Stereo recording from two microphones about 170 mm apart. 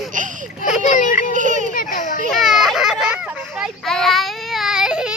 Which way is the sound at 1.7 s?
50° left (ahead or behind).